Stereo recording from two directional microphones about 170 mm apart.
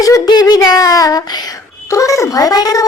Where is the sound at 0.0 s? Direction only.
20° left (ahead or behind).